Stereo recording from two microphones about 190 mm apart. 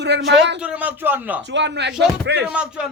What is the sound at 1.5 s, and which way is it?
Speech, 70° right (ahead or behind).